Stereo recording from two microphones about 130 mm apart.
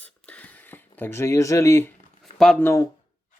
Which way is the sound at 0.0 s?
10° left (ahead or behind).